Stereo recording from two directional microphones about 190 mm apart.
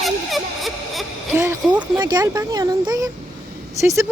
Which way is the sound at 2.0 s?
20° right (ahead or behind).